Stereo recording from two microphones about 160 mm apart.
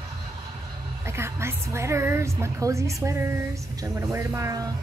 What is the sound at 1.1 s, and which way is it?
A woman's voice, 15° right (ahead or behind).